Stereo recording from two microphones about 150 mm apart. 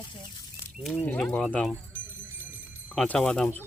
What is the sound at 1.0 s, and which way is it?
Speech, 10° left (ahead or behind).